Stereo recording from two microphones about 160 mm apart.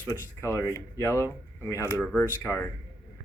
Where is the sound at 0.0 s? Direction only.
15° left (ahead or behind).